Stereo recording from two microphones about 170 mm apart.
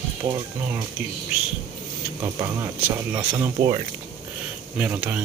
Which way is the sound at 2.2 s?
20° right (ahead or behind).